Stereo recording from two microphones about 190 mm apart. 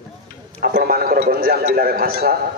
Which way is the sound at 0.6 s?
50° right (ahead or behind).